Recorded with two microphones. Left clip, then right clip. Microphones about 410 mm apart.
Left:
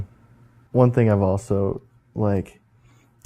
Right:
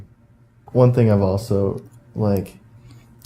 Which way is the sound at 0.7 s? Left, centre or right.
Left.